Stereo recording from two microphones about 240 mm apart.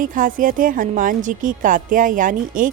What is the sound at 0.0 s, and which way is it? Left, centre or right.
A woman's voice, right.